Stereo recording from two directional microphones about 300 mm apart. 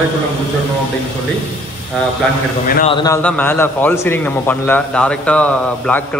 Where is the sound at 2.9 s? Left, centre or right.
Centre.